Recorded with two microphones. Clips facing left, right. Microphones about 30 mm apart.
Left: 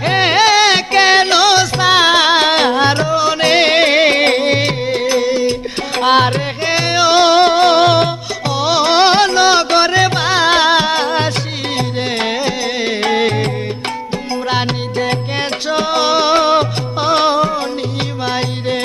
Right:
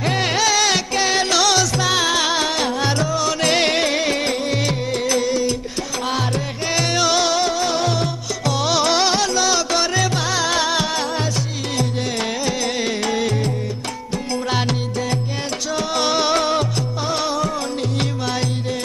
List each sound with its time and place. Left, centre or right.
0.0 s music: left
3.8 s music: left
6.0 s music: left
6.7 s music: left
8.4 s music: left
14.5 s music: left
16.0 s music: left
17.0 s music: left